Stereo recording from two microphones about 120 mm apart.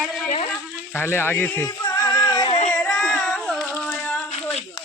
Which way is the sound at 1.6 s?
25° left (ahead or behind).